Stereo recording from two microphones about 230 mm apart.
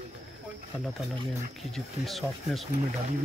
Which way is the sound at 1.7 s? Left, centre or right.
Centre.